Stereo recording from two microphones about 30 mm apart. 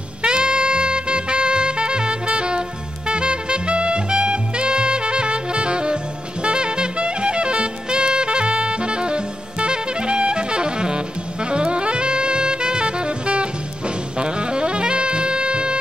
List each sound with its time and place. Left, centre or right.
0.2 s music: right
11.5 s saxophone: right